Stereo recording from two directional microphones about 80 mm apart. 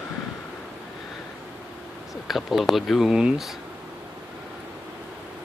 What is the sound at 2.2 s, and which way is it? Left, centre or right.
Speech, centre.